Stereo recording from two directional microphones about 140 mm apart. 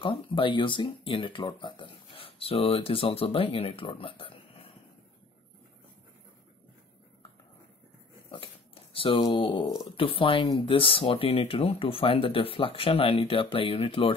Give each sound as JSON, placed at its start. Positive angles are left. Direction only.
{"t": 0.0, "sound": "speech", "side_deg": 35}
{"t": 8.9, "sound": "speech", "side_deg": 40}